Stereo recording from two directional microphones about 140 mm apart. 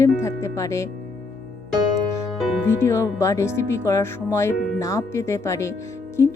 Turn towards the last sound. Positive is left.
turn(degrees=20)  # may be behind; listen again after turning